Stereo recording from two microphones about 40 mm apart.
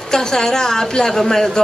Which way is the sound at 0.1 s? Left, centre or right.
Centre.